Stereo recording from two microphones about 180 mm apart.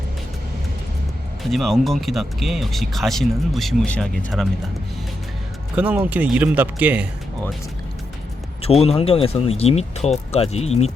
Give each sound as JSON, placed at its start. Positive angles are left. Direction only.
{"t": 1.5, "sound": "speech", "side_deg": 0}
{"t": 5.7, "sound": "speech", "side_deg": -10}
{"t": 8.6, "sound": "speech", "side_deg": 35}